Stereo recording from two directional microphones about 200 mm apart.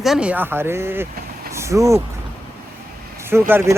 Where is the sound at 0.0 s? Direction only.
5° right (ahead or behind).